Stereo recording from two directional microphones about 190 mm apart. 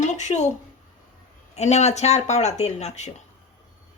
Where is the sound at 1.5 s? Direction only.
35° left (ahead or behind).